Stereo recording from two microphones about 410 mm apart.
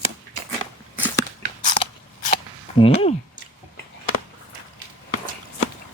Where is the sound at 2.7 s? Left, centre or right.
Centre.